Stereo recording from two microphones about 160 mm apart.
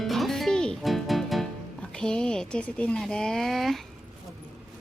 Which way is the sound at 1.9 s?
5° left (ahead or behind).